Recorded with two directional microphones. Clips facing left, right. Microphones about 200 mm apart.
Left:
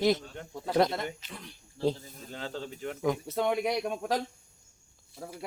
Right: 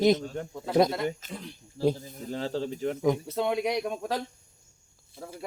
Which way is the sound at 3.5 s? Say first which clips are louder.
Right 2 dB; 15° right (ahead or behind).